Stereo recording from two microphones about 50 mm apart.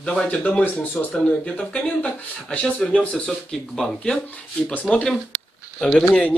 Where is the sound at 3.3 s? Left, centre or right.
Centre.